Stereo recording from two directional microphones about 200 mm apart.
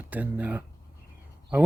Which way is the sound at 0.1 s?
10° right (ahead or behind).